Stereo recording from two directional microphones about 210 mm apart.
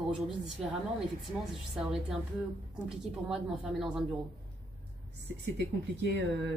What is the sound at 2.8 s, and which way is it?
Speech, centre (ahead or behind).